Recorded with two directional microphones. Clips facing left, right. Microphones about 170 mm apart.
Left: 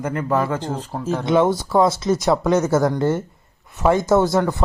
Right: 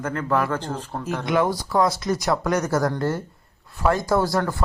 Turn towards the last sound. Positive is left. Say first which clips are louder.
# left 5 dB
turn(degrees=20)  # may be behind; listen again after turning